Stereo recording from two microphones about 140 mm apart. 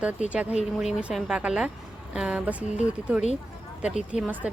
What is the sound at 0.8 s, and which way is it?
A woman's voice, centre (ahead or behind).